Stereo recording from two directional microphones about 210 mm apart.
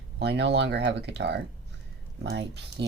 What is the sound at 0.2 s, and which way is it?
Speech, 55° right (ahead or behind).